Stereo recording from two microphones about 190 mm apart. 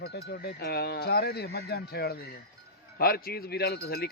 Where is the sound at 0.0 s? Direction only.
60° left (ahead or behind).